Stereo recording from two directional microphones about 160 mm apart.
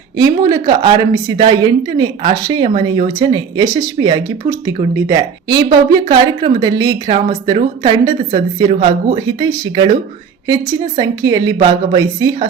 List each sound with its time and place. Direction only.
0.2 s speech: 25° right (ahead or behind)